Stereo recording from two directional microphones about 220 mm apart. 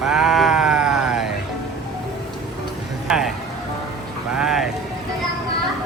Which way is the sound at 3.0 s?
5° right (ahead or behind).